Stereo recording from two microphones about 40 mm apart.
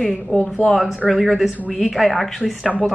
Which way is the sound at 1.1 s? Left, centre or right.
Centre.